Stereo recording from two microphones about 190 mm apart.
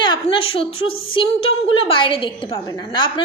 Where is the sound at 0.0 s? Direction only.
25° left (ahead or behind).